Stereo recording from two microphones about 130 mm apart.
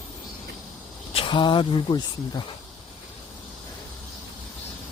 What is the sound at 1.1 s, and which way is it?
Speech, 40° left (ahead or behind).